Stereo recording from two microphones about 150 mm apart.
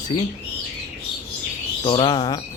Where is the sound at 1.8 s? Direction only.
35° left (ahead or behind).